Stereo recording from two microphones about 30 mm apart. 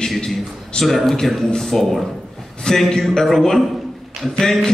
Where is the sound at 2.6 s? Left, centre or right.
Left.